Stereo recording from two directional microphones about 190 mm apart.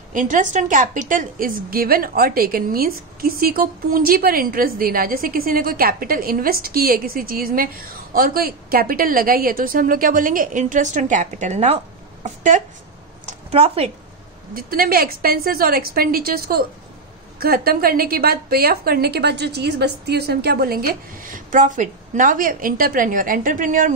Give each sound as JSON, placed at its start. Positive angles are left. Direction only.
{"t": 0.1, "sound": "a woman's voice", "side_deg": -45}
{"t": 14.5, "sound": "a woman's voice", "side_deg": -50}